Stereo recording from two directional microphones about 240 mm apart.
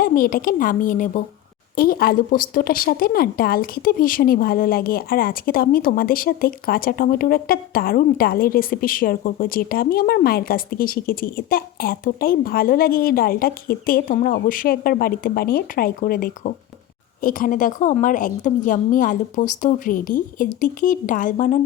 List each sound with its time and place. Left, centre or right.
0.0 s a woman's voice: left